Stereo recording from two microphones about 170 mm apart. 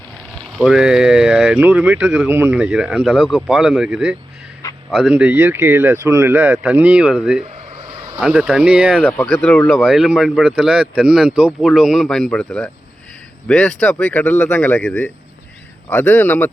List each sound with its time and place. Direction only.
0.5 s speech: centre (ahead or behind)
7.4 s a sound: 35° right (ahead or behind)
8.2 s speech: 5° right (ahead or behind)
9.0 s speech: 5° left (ahead or behind)